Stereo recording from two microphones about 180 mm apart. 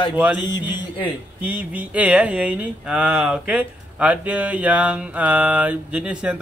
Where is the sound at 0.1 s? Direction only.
10° right (ahead or behind).